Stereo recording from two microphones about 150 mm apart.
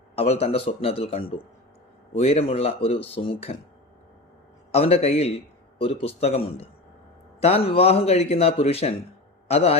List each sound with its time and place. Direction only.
0.2 s speech: 40° left (ahead or behind)
4.7 s a man's voice: 40° left (ahead or behind)